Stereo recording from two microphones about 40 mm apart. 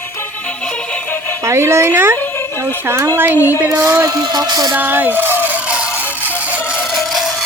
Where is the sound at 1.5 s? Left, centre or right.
Right.